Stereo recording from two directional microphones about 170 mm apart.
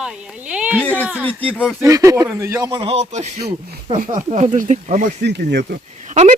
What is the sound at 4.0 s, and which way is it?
Speech, 50° right (ahead or behind).